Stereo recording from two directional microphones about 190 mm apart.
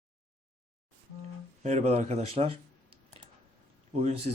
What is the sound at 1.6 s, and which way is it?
Speech, 35° right (ahead or behind).